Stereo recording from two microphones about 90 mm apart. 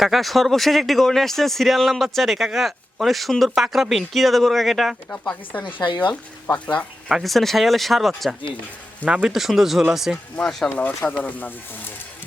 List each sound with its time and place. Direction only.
0.0 s speech: centre (ahead or behind)
5.1 s speech: 15° left (ahead or behind)
7.1 s speech: centre (ahead or behind)
9.0 s speech: 10° right (ahead or behind)
10.3 s speech: 10° left (ahead or behind)
10.7 s speech: 20° left (ahead or behind)